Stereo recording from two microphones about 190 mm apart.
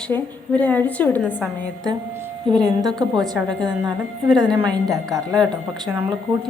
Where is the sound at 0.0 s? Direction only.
5° left (ahead or behind).